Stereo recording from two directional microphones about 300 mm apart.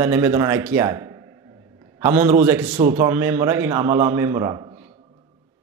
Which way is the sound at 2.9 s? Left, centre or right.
Centre.